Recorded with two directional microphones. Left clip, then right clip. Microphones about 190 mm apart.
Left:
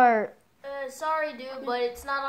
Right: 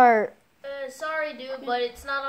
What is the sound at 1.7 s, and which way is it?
Music, 10° left (ahead or behind).